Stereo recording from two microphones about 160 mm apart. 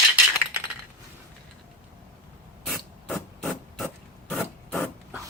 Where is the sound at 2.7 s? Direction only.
Centre (ahead or behind).